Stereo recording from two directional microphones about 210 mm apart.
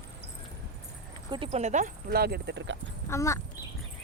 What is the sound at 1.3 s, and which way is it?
Speech, 25° right (ahead or behind).